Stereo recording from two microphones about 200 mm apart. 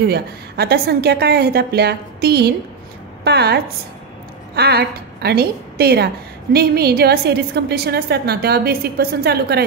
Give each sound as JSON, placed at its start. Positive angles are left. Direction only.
{"t": 0.1, "sound": "a woman's voice", "side_deg": -55}